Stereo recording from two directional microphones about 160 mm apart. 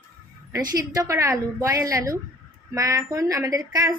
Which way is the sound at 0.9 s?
20° right (ahead or behind).